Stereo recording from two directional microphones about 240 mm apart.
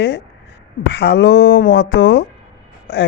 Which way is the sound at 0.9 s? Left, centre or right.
Left.